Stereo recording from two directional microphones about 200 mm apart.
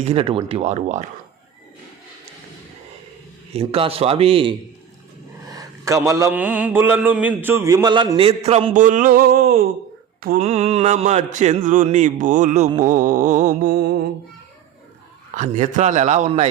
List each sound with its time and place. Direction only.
0.0 s mantra: 30° right (ahead or behind)
3.5 s mantra: 30° right (ahead or behind)
5.5 s mantra: 15° right (ahead or behind); by 14.0 s 50° right (ahead or behind)
15.4 s mantra: 35° right (ahead or behind)